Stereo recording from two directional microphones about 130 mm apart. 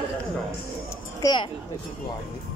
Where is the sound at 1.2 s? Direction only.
35° left (ahead or behind).